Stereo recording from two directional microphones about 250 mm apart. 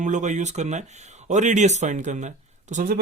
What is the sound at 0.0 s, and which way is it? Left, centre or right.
Speech, right.